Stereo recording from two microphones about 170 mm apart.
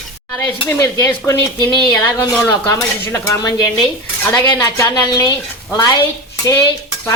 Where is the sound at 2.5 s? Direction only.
20° left (ahead or behind).